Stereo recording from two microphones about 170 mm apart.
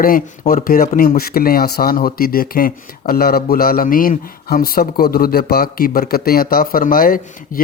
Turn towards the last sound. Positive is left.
turn(degrees=55)  # may be behind; listen again after turning